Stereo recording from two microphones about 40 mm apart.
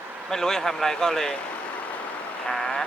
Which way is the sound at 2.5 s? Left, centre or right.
Centre.